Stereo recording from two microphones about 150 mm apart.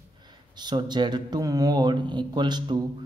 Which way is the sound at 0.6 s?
30° right (ahead or behind).